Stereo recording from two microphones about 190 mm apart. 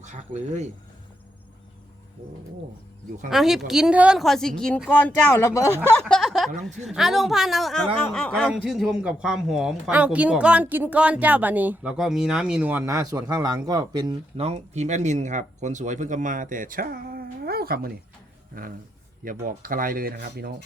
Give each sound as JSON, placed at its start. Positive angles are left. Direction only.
{"t": 0.0, "sound": "speech", "side_deg": -40}
{"t": 3.2, "sound": "speech", "side_deg": 0}
{"t": 6.1, "sound": "a man's voice", "side_deg": 0}